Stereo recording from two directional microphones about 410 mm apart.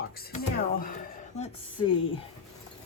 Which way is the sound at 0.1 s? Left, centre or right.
Left.